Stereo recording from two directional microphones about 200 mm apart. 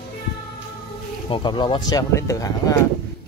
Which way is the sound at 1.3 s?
25° left (ahead or behind).